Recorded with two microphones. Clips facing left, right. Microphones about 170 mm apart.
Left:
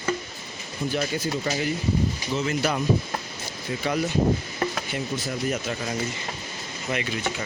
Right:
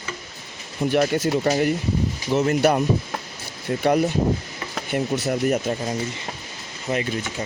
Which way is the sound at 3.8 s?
60° right (ahead or behind).